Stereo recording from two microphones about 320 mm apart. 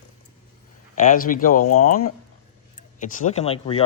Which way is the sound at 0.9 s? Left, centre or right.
Left.